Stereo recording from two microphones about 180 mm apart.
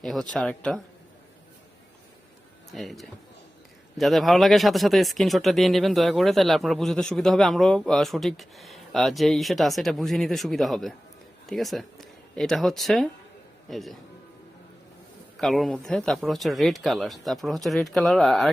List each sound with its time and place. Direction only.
0.0 s speech: centre (ahead or behind)
2.7 s speech: centre (ahead or behind)
15.4 s speech: centre (ahead or behind)